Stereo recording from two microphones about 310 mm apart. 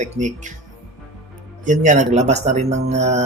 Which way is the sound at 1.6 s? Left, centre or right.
Right.